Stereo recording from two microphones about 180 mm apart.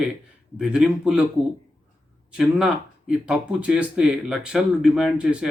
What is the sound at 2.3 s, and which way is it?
Speech, 5° right (ahead or behind).